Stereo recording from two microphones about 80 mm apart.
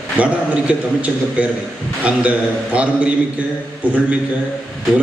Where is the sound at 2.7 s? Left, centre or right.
Centre.